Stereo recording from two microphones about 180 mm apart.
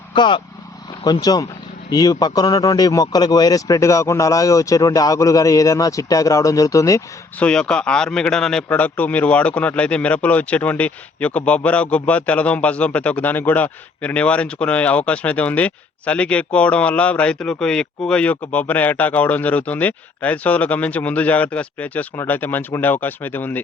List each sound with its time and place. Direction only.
0.1 s speech: 25° left (ahead or behind)
7.4 s a man's voice: 5° left (ahead or behind)